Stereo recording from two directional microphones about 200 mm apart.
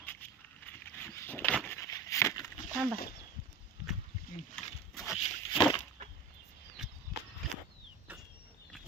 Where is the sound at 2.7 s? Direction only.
10° right (ahead or behind).